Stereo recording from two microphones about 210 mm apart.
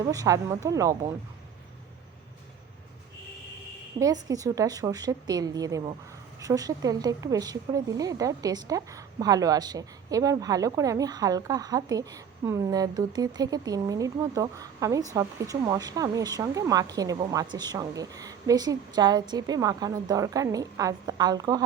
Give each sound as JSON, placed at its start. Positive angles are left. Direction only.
{"t": 0.1, "sound": "a woman's voice", "side_deg": -15}
{"t": 4.0, "sound": "a woman's voice", "side_deg": -15}